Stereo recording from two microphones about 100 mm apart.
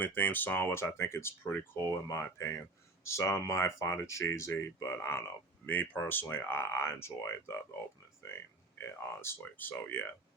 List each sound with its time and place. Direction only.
0.0 s speech: 20° left (ahead or behind)